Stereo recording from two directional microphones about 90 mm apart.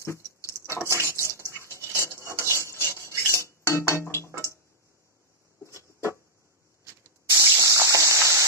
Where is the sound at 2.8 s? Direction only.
30° left (ahead or behind).